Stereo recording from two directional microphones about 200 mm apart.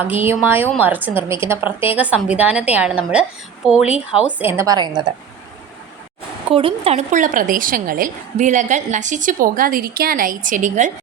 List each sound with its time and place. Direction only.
0.0 s a woman's voice: 10° right (ahead or behind)
6.5 s a woman's voice: 25° right (ahead or behind)